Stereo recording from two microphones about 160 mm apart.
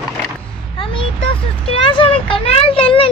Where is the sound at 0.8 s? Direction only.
30° left (ahead or behind).